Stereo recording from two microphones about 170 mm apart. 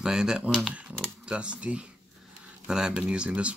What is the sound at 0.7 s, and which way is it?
Typing, 5° right (ahead or behind).